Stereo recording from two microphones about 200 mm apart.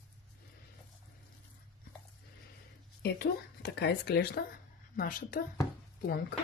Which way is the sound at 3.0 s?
55° left (ahead or behind).